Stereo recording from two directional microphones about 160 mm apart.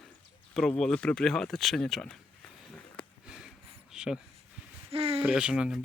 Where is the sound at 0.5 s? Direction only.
5° left (ahead or behind).